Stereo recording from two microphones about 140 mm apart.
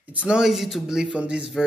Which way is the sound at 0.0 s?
10° right (ahead or behind).